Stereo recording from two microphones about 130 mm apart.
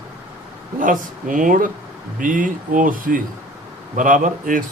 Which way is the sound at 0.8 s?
90° right.